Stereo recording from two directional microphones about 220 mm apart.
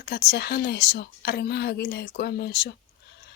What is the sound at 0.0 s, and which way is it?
A woman's voice, 45° left (ahead or behind).